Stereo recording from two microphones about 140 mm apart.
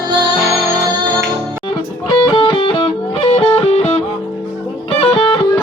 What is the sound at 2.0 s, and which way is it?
Music, 35° left (ahead or behind).